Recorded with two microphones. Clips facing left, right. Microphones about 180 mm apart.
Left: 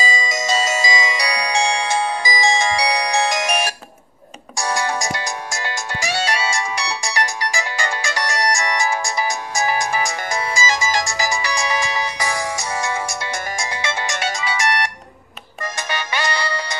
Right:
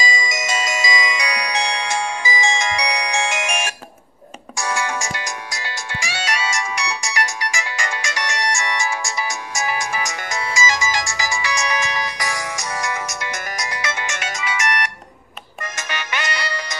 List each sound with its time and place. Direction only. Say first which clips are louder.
0.2 s music: left 4 dB; 30° left (ahead or behind)